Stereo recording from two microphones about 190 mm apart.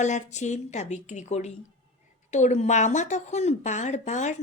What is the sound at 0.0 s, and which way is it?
Speech, 40° left (ahead or behind).